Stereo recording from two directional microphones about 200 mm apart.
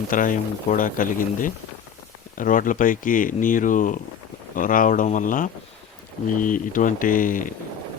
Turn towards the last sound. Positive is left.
turn(degrees=40)  # may be behind; listen again after turning